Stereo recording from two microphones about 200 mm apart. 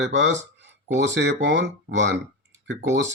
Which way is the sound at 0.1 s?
65° right (ahead or behind).